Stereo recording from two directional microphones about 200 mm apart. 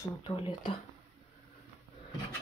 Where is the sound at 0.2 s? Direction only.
25° left (ahead or behind).